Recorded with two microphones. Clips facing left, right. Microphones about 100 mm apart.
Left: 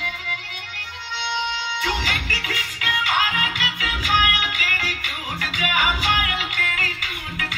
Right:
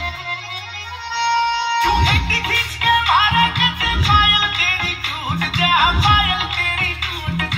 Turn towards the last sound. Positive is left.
turn(degrees=-45)  # may be behind; listen again after turning